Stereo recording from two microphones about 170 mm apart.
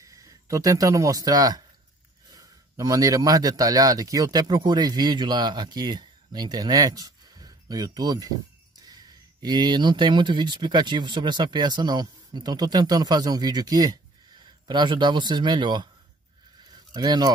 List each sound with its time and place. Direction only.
0.0 s a man's voice: 20° right (ahead or behind)
16.9 s speech: 25° right (ahead or behind)